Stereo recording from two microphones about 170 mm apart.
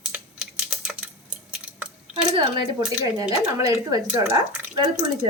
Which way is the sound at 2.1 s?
30° right (ahead or behind).